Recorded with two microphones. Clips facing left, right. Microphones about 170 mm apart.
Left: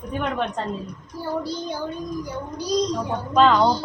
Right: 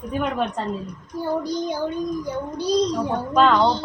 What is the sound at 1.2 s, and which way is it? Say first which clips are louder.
Child singing: right 3 dB; 15° right (ahead or behind).